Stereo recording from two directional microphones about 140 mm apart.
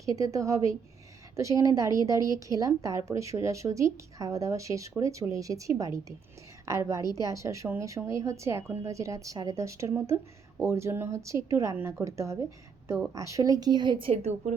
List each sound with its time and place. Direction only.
0.2 s a woman's voice: 25° right (ahead or behind)
14.1 s a woman's voice: 50° right (ahead or behind)